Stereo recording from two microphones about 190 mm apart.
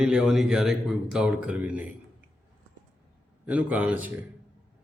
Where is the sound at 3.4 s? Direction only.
5° right (ahead or behind).